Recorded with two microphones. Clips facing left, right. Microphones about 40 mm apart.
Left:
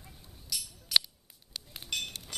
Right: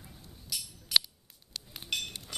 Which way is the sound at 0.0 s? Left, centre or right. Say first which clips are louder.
Right 2 dB; centre.